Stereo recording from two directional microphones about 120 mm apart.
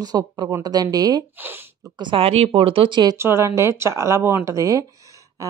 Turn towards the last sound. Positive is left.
turn(degrees=-30)  # may be behind; listen again after turning